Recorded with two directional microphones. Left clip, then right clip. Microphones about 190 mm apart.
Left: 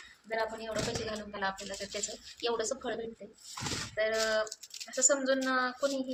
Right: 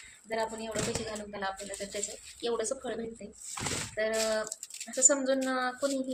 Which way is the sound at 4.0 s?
20° right (ahead or behind).